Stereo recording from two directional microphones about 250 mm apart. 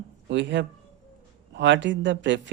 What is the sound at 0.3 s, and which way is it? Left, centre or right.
Speech, right.